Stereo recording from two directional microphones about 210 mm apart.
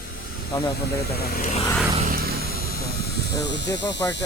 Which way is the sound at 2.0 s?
45° right (ahead or behind).